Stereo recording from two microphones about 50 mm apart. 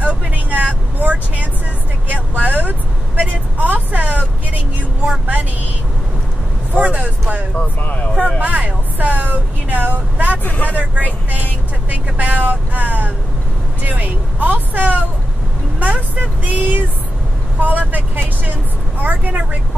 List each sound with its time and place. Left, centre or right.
0.0 s vehicle: right
5.2 s vehicle: right
6.8 s a sound: right
7.5 s speech: left
8.4 s vehicle: right
10.4 s speech: left
10.7 s speech: right
11.2 s vehicle: right
13.8 s speech: right
15.8 s vehicle: right